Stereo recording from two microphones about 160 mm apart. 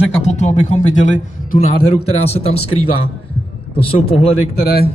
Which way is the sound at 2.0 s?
40° left (ahead or behind).